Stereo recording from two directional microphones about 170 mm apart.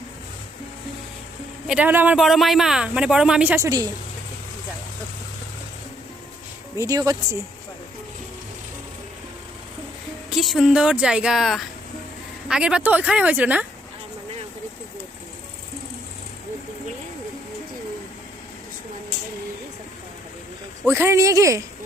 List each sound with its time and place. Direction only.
1.6 s speech: 5° right (ahead or behind)
3.6 s speech: 20° right (ahead or behind)
6.7 s speech: 20° right (ahead or behind)
10.2 s speech: centre (ahead or behind)
20.8 s speech: 15° right (ahead or behind)